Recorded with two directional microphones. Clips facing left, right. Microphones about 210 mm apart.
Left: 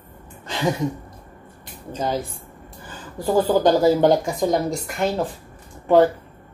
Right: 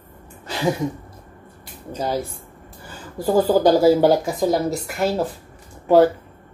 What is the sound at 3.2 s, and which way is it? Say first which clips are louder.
Speech: right 1 dB; 10° right (ahead or behind).